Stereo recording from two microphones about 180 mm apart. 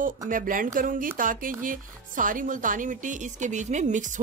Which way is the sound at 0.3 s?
50° right (ahead or behind).